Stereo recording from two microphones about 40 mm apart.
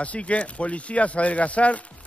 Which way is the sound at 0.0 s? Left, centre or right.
Left.